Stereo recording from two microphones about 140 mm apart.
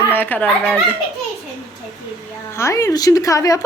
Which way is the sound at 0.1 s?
15° left (ahead or behind).